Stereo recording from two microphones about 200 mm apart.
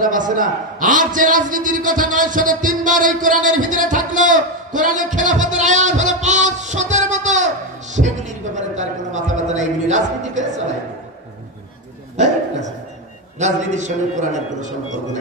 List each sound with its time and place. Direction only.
0.0 s a man's voice: 40° right (ahead or behind)
12.2 s a man's voice: 35° right (ahead or behind)